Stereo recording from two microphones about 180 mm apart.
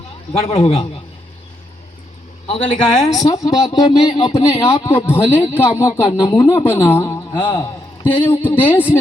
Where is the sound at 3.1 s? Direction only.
20° left (ahead or behind).